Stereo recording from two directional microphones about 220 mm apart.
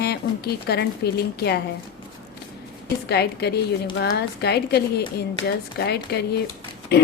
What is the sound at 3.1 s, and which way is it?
A woman's voice, 50° left (ahead or behind).